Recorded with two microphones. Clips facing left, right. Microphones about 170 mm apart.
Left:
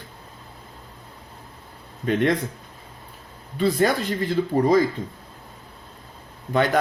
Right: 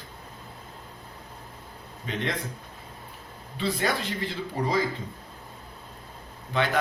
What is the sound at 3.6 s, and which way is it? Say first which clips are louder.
Speech: left 7 dB; 45° left (ahead or behind).